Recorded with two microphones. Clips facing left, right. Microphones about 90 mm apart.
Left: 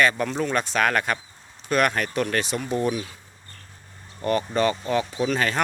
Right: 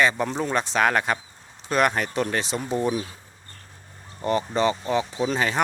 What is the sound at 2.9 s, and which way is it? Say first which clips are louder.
Speech: right 1 dB; 30° right (ahead or behind).